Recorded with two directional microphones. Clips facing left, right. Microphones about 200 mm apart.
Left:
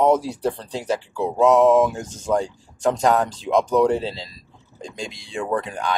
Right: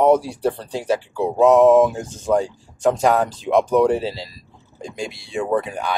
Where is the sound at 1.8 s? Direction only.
35° right (ahead or behind).